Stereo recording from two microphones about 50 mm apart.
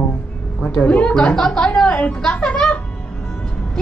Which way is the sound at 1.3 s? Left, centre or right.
Centre.